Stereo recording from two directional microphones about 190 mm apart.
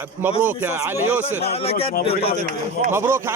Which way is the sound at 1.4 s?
35° left (ahead or behind).